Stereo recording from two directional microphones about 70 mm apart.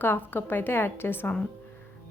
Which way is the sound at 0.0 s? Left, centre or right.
Left.